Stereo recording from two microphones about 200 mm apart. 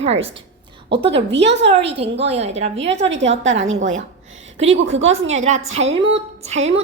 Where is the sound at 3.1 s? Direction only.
65° right (ahead or behind).